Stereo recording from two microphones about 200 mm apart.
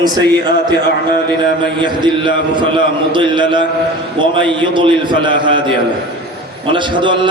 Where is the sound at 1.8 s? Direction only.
25° right (ahead or behind).